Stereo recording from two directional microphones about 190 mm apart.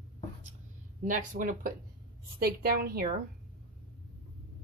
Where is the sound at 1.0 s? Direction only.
40° right (ahead or behind).